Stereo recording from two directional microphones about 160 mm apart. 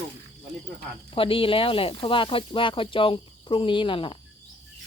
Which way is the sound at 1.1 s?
35° left (ahead or behind).